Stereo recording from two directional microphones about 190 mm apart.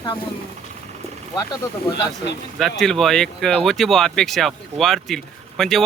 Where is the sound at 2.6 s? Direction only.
Centre (ahead or behind).